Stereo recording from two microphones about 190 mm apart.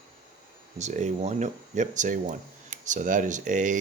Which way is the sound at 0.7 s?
40° right (ahead or behind).